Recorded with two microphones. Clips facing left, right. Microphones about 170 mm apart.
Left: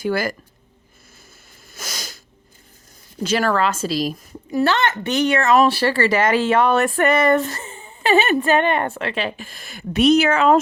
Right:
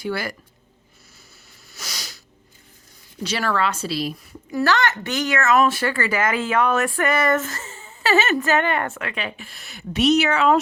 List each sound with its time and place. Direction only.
0.0 s a woman's voice: 45° left (ahead or behind)
1.7 s a sound: 50° left (ahead or behind)
3.2 s a woman's voice: 45° left (ahead or behind)
4.5 s a woman's voice: 25° left (ahead or behind)
7.1 s a woman's voice: 20° left (ahead or behind)
7.6 s a sound: 15° left (ahead or behind)
8.5 s a woman's voice: 20° left (ahead or behind); by 10.6 s 45° left (ahead or behind)